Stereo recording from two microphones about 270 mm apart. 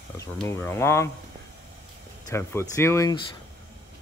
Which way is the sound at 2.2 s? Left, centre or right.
Centre.